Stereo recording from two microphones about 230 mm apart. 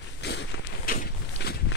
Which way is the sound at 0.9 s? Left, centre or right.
Left.